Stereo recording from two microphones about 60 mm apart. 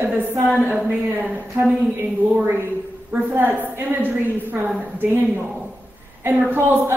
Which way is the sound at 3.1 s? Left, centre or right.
Right.